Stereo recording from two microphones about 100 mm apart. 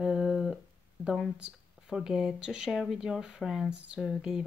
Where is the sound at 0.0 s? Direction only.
10° right (ahead or behind).